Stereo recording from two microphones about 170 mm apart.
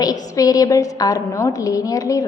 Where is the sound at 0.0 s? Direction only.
20° left (ahead or behind).